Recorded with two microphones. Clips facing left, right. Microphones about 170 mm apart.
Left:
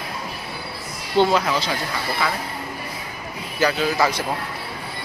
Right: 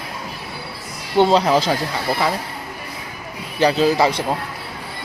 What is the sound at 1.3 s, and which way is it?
Speech, 30° right (ahead or behind).